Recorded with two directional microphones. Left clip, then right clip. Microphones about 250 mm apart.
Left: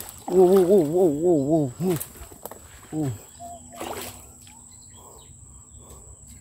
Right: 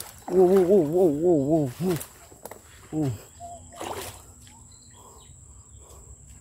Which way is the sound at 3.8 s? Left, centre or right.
Centre.